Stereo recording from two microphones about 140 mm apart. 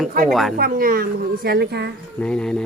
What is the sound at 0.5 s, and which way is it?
Speech, 90° right.